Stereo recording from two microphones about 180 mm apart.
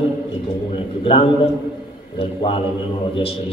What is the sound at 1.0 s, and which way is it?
A man's voice, 30° left (ahead or behind).